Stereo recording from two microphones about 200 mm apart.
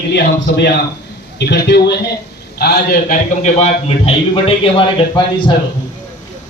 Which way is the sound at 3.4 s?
35° left (ahead or behind).